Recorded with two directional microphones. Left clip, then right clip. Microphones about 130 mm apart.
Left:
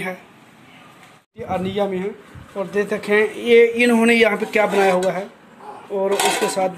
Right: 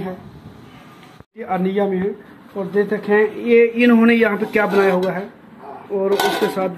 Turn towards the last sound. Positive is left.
turn(degrees=30)  # may be behind; listen again after turning